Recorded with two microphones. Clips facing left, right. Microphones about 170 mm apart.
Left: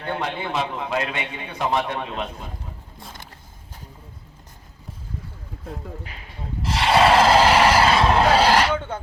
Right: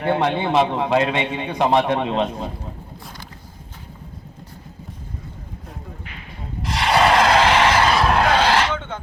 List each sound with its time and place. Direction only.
0.0 s a man's voice: 75° right (ahead or behind)
0.3 s a man's voice: 30° right (ahead or behind)
1.5 s a man's voice: 70° right (ahead or behind)
6.7 s vehicle: centre (ahead or behind)
8.6 s a sound: 10° left (ahead or behind)